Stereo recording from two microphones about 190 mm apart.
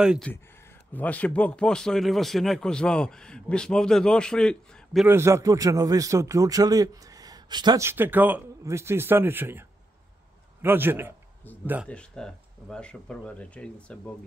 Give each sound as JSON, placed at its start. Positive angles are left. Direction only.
{"t": 0.0, "sound": "a man's voice", "side_deg": -5}
{"t": 0.9, "sound": "a man's voice", "side_deg": 10}
{"t": 5.0, "sound": "a man's voice", "side_deg": -15}
{"t": 11.9, "sound": "a man's voice", "side_deg": 5}